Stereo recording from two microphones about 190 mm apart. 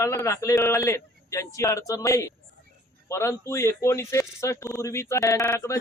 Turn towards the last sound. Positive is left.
turn(degrees=15)  # may be behind; listen again after turning